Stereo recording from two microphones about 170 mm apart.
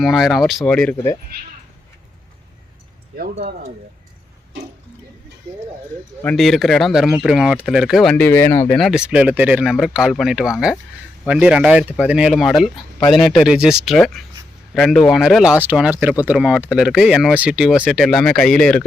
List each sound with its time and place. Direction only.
0.0 s speech: centre (ahead or behind)
3.4 s speech: 70° right (ahead or behind)
6.2 s speech: centre (ahead or behind)
8.8 s speech: 5° right (ahead or behind)